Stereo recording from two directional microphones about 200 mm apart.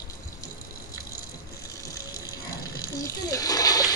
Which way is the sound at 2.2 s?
15° left (ahead or behind).